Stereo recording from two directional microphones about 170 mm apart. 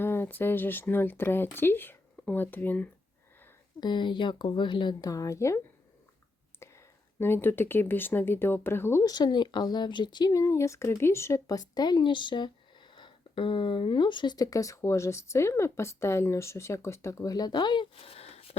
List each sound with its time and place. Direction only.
0.0 s speech: 15° left (ahead or behind)
3.8 s speech: 25° left (ahead or behind)
6.6 s speech: 15° left (ahead or behind); by 18.4 s 35° left (ahead or behind)